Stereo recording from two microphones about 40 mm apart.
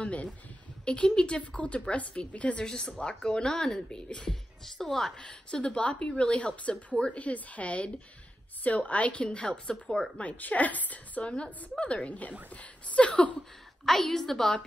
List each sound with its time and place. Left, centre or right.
0.0 s a sound: left
0.8 s a woman's voice: left
2.6 s a woman's voice: centre
4.6 s a woman's voice: centre
5.2 s a woman's voice: left
10.4 s a woman's voice: left
13.8 s a woman's voice: centre